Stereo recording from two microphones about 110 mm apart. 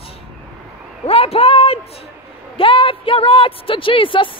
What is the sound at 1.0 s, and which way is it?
Speech, 60° left (ahead or behind).